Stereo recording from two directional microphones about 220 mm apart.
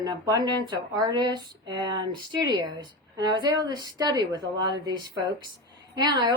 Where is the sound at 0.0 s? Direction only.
15° right (ahead or behind).